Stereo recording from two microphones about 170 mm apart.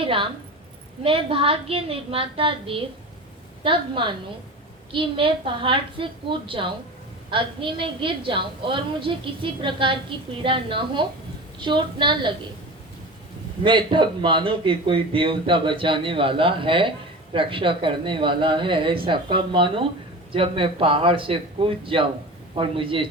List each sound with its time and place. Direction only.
0.0 s a woman's voice: 30° right (ahead or behind)
13.7 s a woman's voice: 30° right (ahead or behind)